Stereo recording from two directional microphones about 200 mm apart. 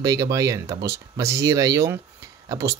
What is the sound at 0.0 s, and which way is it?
Speech, 15° right (ahead or behind).